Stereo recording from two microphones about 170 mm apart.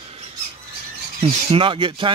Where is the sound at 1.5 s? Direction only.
30° right (ahead or behind).